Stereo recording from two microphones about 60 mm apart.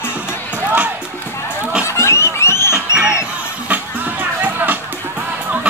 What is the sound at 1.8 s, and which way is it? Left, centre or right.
Music, left.